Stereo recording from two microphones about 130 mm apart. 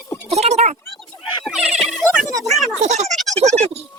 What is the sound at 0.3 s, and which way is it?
Speech, 60° right (ahead or behind).